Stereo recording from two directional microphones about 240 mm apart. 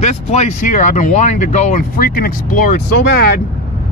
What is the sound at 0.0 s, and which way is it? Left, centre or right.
Speech, left.